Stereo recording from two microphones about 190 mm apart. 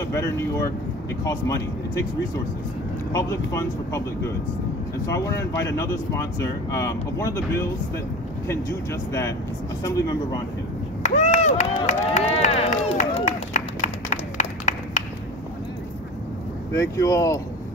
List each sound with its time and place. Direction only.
0.1 s speech: 15° left (ahead or behind)
3.1 s speech: 15° left (ahead or behind)
11.0 s a sound: 35° left (ahead or behind)
16.7 s speech: 15° left (ahead or behind)